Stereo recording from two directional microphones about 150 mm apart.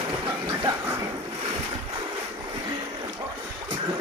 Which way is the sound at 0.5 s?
25° right (ahead or behind).